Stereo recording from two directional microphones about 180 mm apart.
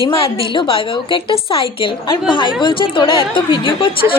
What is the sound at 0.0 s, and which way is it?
A woman's voice, 30° left (ahead or behind).